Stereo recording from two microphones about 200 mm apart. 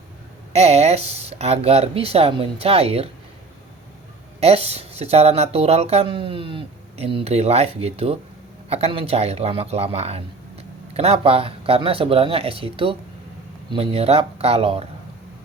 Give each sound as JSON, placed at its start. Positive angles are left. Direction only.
{"t": 0.5, "sound": "speech", "side_deg": -30}
{"t": 4.4, "sound": "speech", "side_deg": -30}